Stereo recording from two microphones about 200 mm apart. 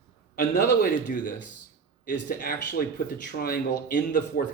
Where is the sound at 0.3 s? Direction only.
50° left (ahead or behind).